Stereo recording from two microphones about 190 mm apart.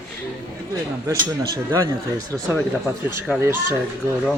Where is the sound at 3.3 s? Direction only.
10° right (ahead or behind).